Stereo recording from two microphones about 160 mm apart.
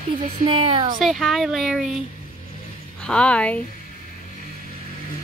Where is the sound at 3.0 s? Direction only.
5° left (ahead or behind).